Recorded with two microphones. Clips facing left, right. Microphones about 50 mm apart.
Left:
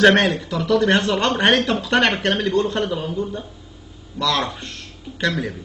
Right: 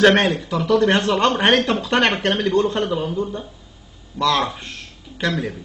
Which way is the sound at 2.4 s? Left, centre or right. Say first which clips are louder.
Right 3 dB; right.